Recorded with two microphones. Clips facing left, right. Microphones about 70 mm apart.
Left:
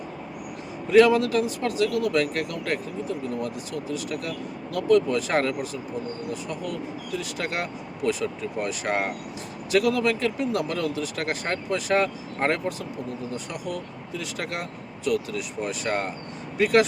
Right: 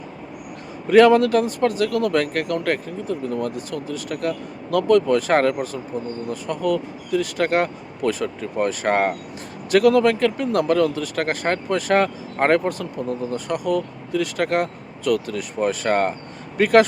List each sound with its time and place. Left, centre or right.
0.9 s speech: right